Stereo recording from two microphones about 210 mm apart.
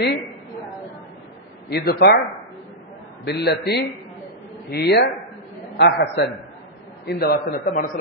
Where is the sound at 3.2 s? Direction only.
50° left (ahead or behind).